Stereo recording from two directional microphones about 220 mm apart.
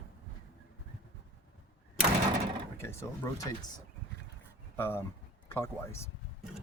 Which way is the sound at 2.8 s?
10° left (ahead or behind).